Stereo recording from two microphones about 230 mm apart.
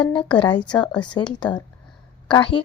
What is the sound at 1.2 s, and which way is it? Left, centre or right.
A woman's voice, centre.